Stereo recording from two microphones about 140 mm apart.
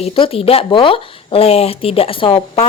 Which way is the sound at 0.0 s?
45° left (ahead or behind).